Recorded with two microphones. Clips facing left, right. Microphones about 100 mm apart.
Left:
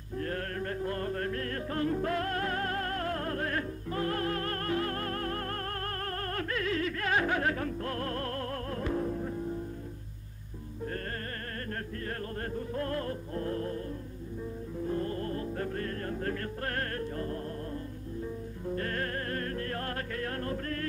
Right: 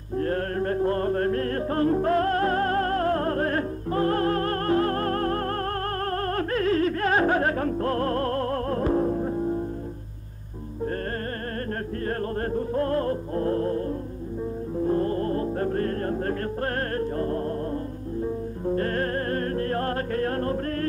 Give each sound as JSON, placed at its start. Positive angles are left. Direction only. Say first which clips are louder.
{"t": 0.2, "sound": "music", "louder": "right 9 dB", "side_deg": -40}
{"t": 12.4, "sound": "music", "louder": "right 9 dB", "side_deg": -40}